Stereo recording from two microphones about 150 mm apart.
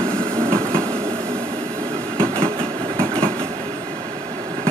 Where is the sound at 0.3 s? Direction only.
20° right (ahead or behind).